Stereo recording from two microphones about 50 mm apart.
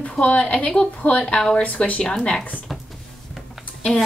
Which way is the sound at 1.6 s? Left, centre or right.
Left.